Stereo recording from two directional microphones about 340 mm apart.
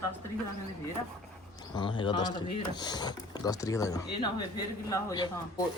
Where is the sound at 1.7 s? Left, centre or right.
Centre.